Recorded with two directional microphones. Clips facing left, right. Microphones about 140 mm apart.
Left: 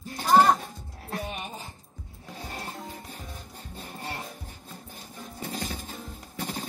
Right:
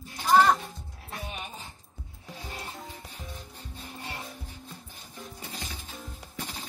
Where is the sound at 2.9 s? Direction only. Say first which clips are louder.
Left 2 dB; 50° left (ahead or behind).